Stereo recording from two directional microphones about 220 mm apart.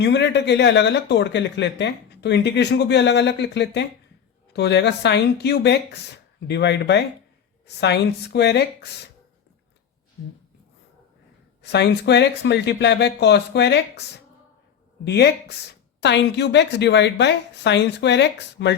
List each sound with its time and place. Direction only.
0.0 s speech: 50° left (ahead or behind)
11.6 s speech: 50° left (ahead or behind)
15.0 s speech: 50° left (ahead or behind)